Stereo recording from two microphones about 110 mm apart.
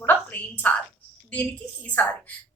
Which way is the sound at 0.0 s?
15° left (ahead or behind).